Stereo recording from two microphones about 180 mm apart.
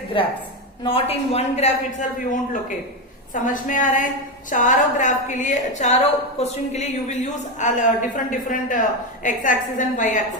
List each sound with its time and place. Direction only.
0.1 s a woman's voice: 30° left (ahead or behind); by 10.2 s 45° left (ahead or behind)